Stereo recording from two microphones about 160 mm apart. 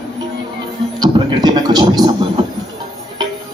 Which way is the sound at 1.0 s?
25° right (ahead or behind).